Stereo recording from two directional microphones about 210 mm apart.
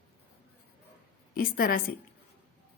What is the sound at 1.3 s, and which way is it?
Speech, 45° left (ahead or behind).